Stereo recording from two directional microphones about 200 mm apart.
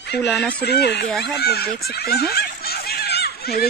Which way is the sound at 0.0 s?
60° left (ahead or behind).